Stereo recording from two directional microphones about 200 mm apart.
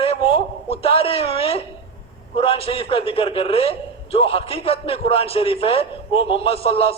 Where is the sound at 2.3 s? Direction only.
30° left (ahead or behind).